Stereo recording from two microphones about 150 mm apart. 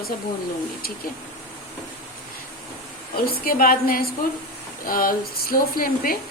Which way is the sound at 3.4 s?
70° left (ahead or behind).